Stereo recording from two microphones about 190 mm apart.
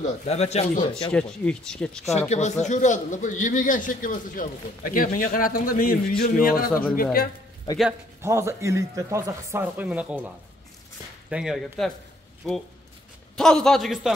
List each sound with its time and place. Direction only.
0.0 s speech: 35° left (ahead or behind)
1.1 s speech: 5° left (ahead or behind)
2.1 s a man's voice: 35° left (ahead or behind)
7.7 s a man's voice: 20° left (ahead or behind)
8.2 s speech: 15° right (ahead or behind)